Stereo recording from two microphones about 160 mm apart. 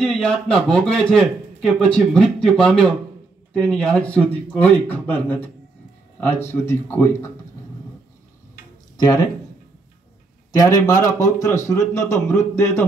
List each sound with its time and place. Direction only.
0.0 s a man's voice: 5° left (ahead or behind)
6.5 s a man's voice: 15° left (ahead or behind)
8.9 s speech: 25° left (ahead or behind)
10.5 s a man's voice: 20° left (ahead or behind)